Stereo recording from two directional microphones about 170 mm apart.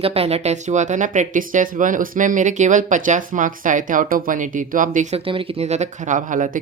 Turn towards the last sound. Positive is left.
turn(degrees=-50)  # may be behind; listen again after turning